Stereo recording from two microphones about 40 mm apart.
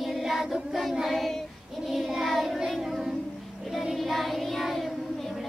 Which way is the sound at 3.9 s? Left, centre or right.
Centre.